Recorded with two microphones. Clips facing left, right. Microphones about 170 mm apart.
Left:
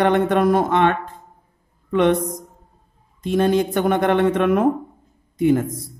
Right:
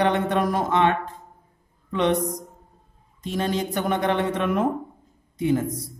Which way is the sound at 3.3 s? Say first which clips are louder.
Left 8 dB; 55° left (ahead or behind).